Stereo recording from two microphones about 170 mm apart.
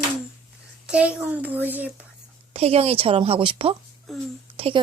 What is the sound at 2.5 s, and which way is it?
A woman's voice, 35° right (ahead or behind).